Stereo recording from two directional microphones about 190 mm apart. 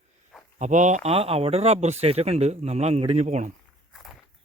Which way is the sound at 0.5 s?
40° right (ahead or behind).